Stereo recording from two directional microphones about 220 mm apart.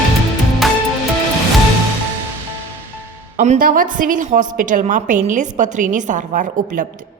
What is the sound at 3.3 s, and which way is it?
A woman's voice, 35° right (ahead or behind).